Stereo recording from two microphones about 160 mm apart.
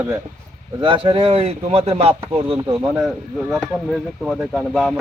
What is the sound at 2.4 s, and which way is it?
Speech, 25° right (ahead or behind).